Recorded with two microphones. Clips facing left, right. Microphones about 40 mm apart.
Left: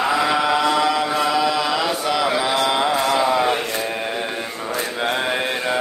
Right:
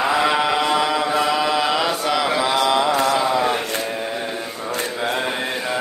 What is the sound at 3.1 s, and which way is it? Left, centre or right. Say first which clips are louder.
Mantra: left 1 dB; centre.